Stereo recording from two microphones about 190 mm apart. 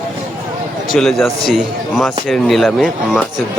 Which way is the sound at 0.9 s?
Centre (ahead or behind).